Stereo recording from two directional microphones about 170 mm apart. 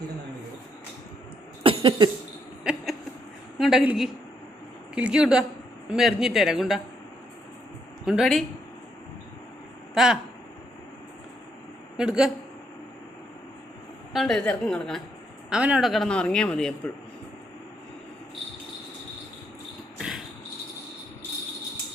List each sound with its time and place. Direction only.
1.6 s cough: 30° right (ahead or behind)
3.6 s a man's voice: 5° right (ahead or behind)
8.0 s a man's voice: centre (ahead or behind)
9.9 s speech: 5° right (ahead or behind)
11.9 s a man's voice: 5° right (ahead or behind)
14.1 s a man's voice: centre (ahead or behind)
20.0 s cricket: 5° right (ahead or behind)